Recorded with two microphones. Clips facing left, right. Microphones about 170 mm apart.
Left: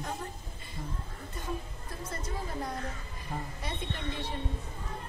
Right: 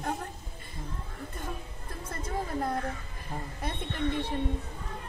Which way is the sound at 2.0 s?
55° right (ahead or behind).